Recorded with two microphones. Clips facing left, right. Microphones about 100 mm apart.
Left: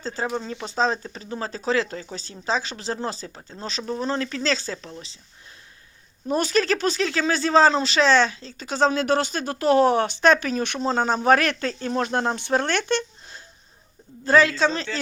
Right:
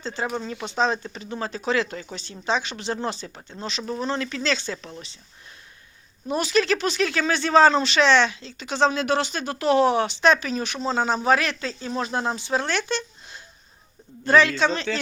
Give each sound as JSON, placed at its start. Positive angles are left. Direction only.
{"t": 0.0, "sound": "speech", "side_deg": 40}
{"t": 6.3, "sound": "speech", "side_deg": 40}
{"t": 14.5, "sound": "speech", "side_deg": 35}